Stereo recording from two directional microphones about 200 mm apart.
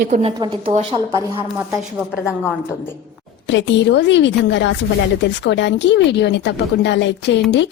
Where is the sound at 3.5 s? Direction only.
65° left (ahead or behind).